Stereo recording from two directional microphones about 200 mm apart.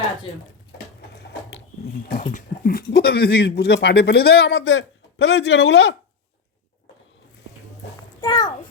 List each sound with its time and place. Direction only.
1.2 s a sound: 60° left (ahead or behind)
2.0 s speech: 45° left (ahead or behind); by 6.0 s 60° left (ahead or behind)
8.2 s a child's voice: 20° left (ahead or behind)